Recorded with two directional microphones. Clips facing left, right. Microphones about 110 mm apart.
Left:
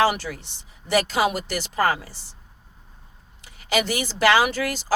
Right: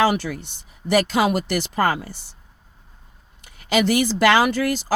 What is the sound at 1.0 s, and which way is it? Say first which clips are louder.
Speech: right 3 dB; 45° right (ahead or behind).